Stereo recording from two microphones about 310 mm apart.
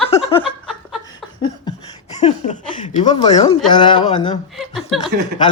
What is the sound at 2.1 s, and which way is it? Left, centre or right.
Chuckle, left.